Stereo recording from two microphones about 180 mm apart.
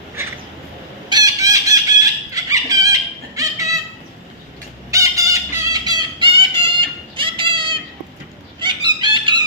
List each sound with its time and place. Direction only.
1.1 s chicken: 20° right (ahead or behind)
4.9 s fowl: 15° right (ahead or behind)